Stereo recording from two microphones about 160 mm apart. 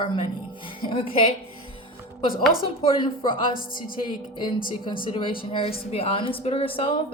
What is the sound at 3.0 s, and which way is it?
Speech, 30° left (ahead or behind).